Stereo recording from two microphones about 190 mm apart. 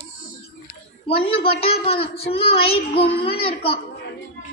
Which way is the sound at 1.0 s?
30° left (ahead or behind).